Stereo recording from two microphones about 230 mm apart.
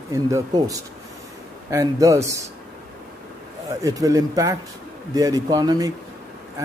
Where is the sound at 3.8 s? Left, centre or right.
Centre.